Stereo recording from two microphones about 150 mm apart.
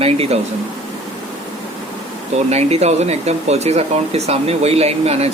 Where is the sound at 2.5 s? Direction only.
45° right (ahead or behind).